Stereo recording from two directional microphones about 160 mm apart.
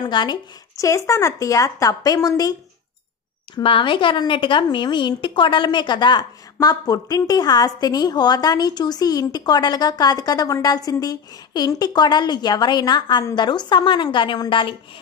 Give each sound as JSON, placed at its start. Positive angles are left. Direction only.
{"t": 0.0, "sound": "speech", "side_deg": 30}
{"t": 3.5, "sound": "speech", "side_deg": 30}